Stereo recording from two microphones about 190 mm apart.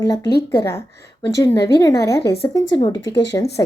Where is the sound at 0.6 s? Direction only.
15° left (ahead or behind).